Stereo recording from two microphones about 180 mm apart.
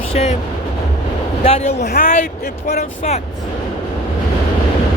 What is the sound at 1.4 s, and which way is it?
Speech, 35° left (ahead or behind).